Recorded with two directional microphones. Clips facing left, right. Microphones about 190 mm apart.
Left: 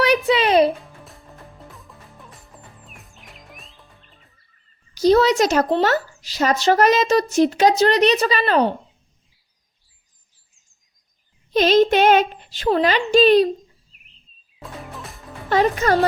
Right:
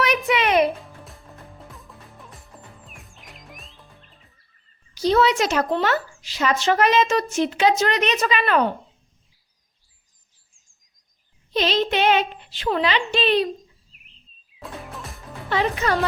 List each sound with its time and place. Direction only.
0.0 s music: 30° left (ahead or behind)
0.8 s music: centre (ahead or behind)
4.9 s speech: 40° left (ahead or behind)
11.5 s speech: 45° left (ahead or behind)
14.6 s music: centre (ahead or behind)
15.4 s speech: 40° left (ahead or behind)